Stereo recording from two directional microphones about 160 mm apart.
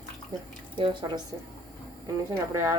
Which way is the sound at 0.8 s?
30° right (ahead or behind).